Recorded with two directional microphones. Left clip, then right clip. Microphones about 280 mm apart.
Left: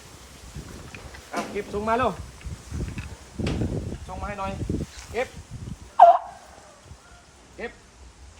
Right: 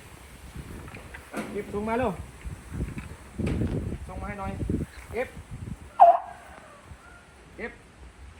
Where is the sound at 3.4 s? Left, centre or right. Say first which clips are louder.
Left 2 dB; centre.